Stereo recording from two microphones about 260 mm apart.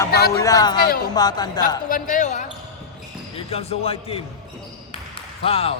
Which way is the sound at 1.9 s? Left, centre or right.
Left.